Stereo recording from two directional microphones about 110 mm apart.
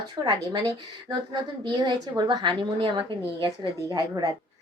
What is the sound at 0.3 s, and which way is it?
A woman's voice, 35° right (ahead or behind).